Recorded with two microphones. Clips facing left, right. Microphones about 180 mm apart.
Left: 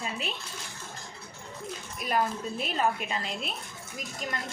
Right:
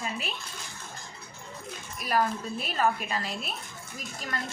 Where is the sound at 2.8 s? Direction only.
25° left (ahead or behind).